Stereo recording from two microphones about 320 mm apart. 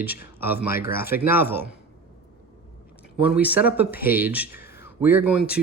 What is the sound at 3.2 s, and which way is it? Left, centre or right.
Speech, centre.